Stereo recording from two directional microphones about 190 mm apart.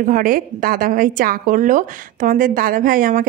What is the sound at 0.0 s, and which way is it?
A woman's voice, 45° right (ahead or behind).